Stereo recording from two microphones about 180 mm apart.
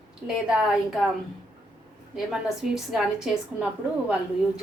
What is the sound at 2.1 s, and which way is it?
A woman's voice, centre (ahead or behind).